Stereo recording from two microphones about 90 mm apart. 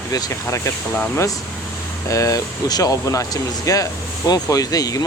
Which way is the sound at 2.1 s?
35° left (ahead or behind).